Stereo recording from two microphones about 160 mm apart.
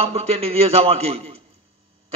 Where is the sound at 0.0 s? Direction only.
40° right (ahead or behind).